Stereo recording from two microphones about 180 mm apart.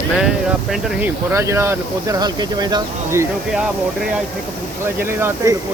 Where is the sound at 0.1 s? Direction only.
Centre (ahead or behind).